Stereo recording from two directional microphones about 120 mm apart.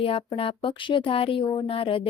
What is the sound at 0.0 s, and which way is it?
A woman's voice, 50° left (ahead or behind).